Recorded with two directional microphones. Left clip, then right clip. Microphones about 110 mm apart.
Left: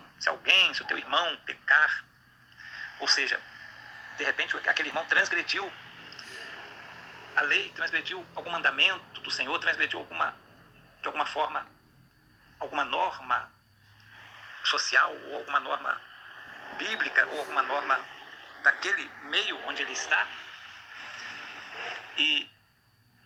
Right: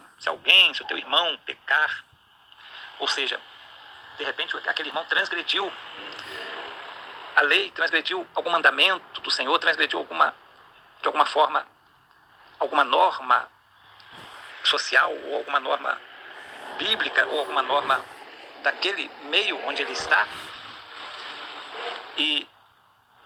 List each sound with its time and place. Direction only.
0.3 s a man's voice: 25° right (ahead or behind)
3.8 s a man's voice: 15° right (ahead or behind)
5.5 s a man's voice: 50° right (ahead or behind)
21.0 s radio: 40° right (ahead or behind)